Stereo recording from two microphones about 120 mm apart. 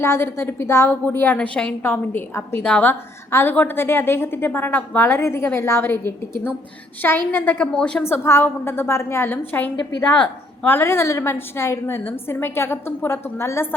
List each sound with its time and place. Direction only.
0.0 s a woman's voice: 20° left (ahead or behind)
2.6 s a woman's voice: 10° left (ahead or behind)
8.0 s a woman's voice: 20° left (ahead or behind)